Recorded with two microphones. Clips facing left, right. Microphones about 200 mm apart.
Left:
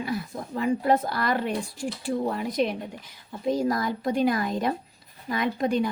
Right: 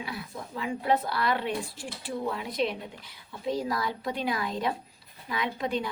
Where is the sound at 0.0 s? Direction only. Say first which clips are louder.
Left 7 dB; 45° left (ahead or behind).